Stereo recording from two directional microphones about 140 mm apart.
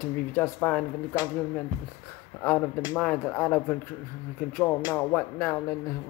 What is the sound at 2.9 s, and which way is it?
Speech, 15° left (ahead or behind).